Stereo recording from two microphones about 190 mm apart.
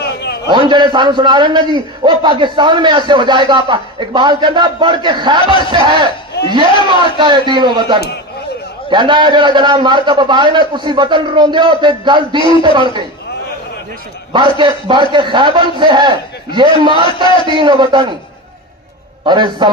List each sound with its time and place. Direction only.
0.0 s a sound: 60° left (ahead or behind)
0.5 s a man's voice: 25° right (ahead or behind)
14.3 s a man's voice: 25° right (ahead or behind)
19.2 s a man's voice: 25° right (ahead or behind)